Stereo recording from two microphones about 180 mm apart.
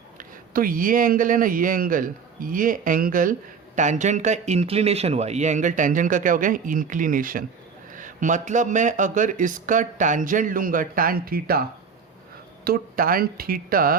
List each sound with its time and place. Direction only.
0.2 s speech: 50° right (ahead or behind)
12.6 s speech: 55° right (ahead or behind)